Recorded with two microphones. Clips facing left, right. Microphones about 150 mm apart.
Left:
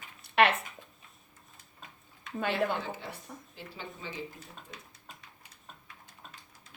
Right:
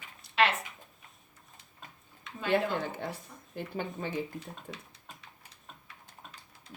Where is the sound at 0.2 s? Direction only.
55° left (ahead or behind).